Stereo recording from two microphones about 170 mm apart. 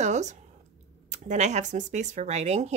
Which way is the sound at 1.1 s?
45° right (ahead or behind).